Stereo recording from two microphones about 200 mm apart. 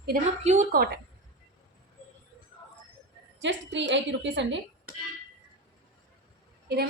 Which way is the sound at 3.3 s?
65° right (ahead or behind).